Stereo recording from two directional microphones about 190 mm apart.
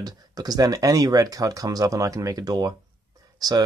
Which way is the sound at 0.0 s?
20° right (ahead or behind).